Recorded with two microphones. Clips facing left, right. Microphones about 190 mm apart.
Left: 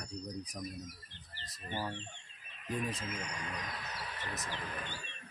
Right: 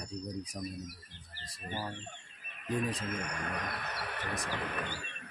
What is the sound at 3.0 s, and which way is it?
Speech, 55° right (ahead or behind).